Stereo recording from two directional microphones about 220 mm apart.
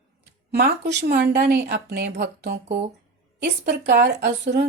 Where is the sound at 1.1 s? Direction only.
50° right (ahead or behind).